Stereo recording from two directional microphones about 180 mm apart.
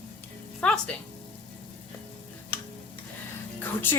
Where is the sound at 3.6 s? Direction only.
10° left (ahead or behind).